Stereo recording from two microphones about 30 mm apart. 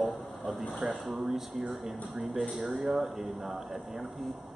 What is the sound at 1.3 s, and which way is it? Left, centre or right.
Speech, centre.